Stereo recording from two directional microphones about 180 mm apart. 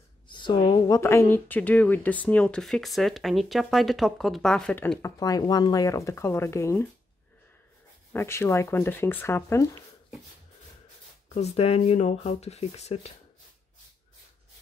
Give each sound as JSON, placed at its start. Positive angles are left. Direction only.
{"t": 0.3, "sound": "speech", "side_deg": 25}
{"t": 8.1, "sound": "speech", "side_deg": 15}
{"t": 11.3, "sound": "speech", "side_deg": 35}